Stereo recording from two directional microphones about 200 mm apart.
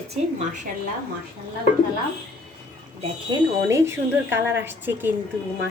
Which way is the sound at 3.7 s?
15° right (ahead or behind).